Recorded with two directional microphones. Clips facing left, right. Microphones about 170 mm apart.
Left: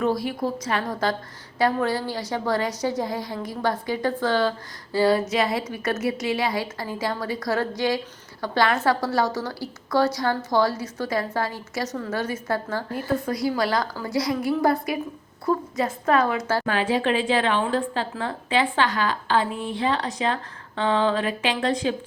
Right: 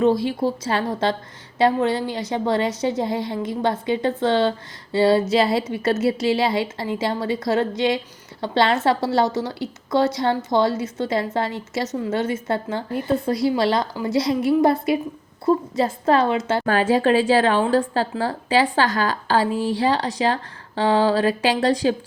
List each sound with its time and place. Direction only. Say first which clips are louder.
0.0 s a woman's voice: right 5 dB; 25° right (ahead or behind)
16.6 s a woman's voice: right 7 dB; 40° right (ahead or behind)